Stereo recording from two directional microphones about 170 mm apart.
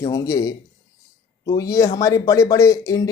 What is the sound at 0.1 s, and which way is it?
Speech, 20° left (ahead or behind).